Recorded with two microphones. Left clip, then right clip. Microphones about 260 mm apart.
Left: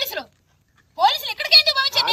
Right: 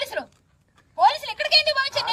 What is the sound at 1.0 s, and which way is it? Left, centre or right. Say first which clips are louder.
A woman's voice: even; centre.